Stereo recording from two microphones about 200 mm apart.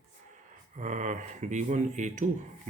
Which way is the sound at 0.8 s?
40° right (ahead or behind).